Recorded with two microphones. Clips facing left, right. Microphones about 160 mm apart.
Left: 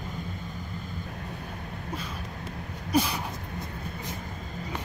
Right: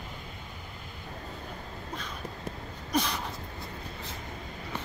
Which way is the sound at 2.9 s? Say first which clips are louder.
Left 4 dB; 5° left (ahead or behind).